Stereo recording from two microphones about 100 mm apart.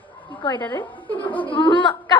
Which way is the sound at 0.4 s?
55° left (ahead or behind).